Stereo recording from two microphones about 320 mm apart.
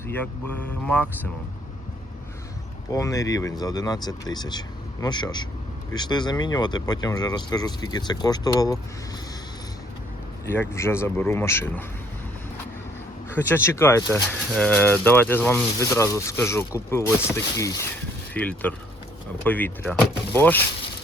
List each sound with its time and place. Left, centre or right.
0.9 s speech: centre
2.9 s speech: centre
10.4 s speech: centre
13.3 s speech: centre